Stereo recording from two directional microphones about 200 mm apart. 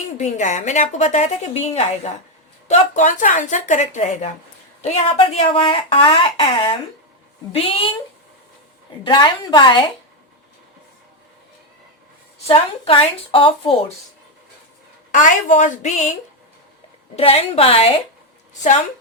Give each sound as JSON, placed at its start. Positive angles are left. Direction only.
{"t": 0.2, "sound": "speech", "side_deg": 35}
{"t": 9.0, "sound": "speech", "side_deg": 25}
{"t": 12.5, "sound": "speech", "side_deg": 25}
{"t": 15.1, "sound": "speech", "side_deg": 40}
{"t": 17.2, "sound": "speech", "side_deg": 30}